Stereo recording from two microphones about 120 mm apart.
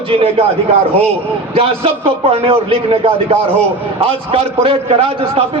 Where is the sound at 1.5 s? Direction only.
50° right (ahead or behind).